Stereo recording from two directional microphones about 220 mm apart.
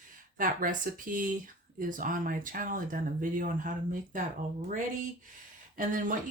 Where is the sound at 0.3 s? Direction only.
40° right (ahead or behind).